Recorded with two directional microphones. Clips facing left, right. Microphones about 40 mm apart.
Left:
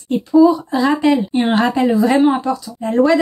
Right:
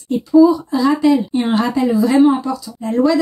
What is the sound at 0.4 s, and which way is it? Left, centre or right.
Speech, left.